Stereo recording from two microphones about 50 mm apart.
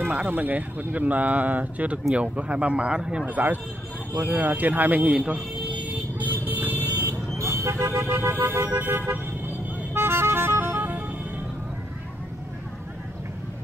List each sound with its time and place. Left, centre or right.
0.0 s speech: right; by 3.3 s centre
3.3 s speech: right
6.1 s vehicle: right
7.0 s vehicle: right
8.0 s vehicle: right